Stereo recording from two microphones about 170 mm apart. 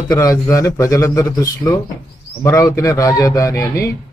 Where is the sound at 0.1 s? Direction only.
20° left (ahead or behind).